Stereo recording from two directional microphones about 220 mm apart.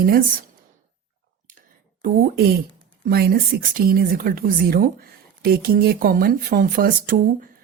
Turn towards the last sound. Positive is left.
turn(degrees=-40)  # may be behind; listen again after turning